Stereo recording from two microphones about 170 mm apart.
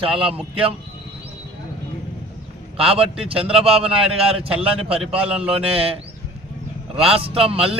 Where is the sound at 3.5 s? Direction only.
35° right (ahead or behind).